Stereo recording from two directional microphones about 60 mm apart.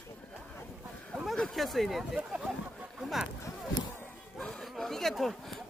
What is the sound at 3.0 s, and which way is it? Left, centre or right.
Speech, centre.